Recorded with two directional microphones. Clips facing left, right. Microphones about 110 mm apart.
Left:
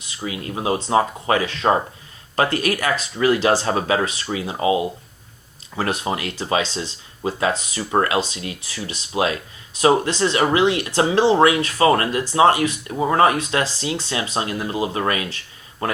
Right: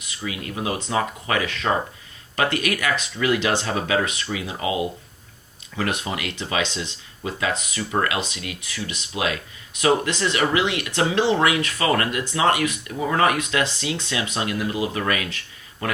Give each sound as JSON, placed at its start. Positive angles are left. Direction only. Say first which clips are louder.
{"t": 0.3, "sound": "speech", "louder": "left 4 dB", "side_deg": 30}